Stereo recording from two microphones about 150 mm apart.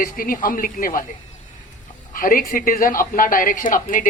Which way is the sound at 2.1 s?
70° left (ahead or behind).